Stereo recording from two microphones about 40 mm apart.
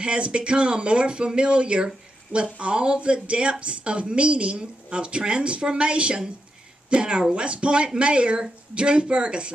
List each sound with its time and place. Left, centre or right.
0.0 s speech: right